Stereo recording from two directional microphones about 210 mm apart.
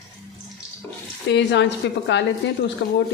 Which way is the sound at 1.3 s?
55° left (ahead or behind).